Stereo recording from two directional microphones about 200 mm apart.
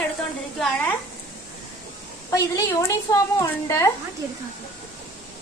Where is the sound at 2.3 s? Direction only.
15° left (ahead or behind).